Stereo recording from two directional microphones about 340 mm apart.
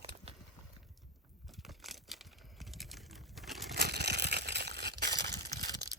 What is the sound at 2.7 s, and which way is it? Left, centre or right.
Crumpling, centre.